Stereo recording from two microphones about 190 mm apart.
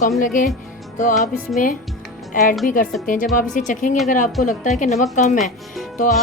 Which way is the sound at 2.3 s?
45° left (ahead or behind).